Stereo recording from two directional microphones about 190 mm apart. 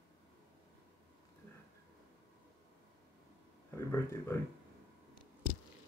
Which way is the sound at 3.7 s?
15° left (ahead or behind).